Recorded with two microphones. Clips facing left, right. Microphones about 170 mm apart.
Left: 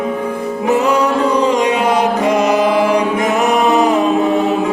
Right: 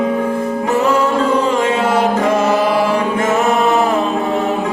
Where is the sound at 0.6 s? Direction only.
15° left (ahead or behind).